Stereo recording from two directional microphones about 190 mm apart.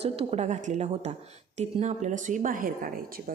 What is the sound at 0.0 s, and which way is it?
A woman's voice, 30° right (ahead or behind).